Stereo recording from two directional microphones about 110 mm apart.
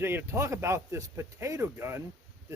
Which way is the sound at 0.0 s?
20° right (ahead or behind).